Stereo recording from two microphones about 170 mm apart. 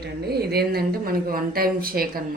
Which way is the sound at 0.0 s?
70° right (ahead or behind).